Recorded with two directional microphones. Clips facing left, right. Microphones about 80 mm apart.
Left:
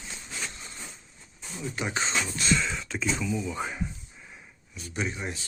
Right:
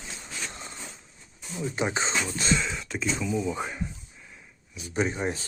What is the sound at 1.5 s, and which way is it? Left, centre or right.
Speech, right.